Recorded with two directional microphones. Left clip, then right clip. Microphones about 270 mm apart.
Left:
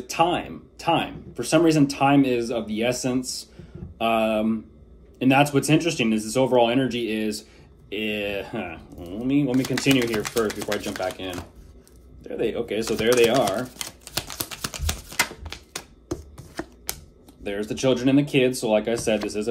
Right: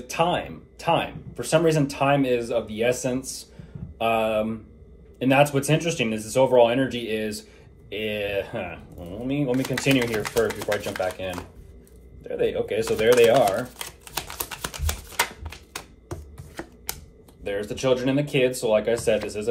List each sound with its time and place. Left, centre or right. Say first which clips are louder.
0.0 s speech: left 1 dB; centre
12.2 s typewriter: right 2 dB; centre
15.4 s a sound: left 2 dB; centre
16.9 s typewriter: right 1 dB; centre
17.4 s speech: left 1 dB; centre